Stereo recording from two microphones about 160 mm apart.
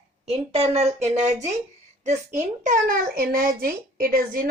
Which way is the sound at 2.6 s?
60° right (ahead or behind).